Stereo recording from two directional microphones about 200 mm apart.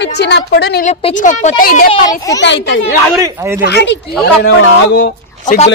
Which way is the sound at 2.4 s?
65° left (ahead or behind).